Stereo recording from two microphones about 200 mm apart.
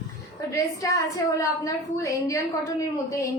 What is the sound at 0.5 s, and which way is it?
A woman's voice, 15° left (ahead or behind).